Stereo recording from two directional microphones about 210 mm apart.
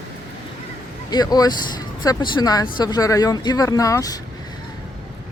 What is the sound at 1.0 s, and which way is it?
Speech, 20° left (ahead or behind).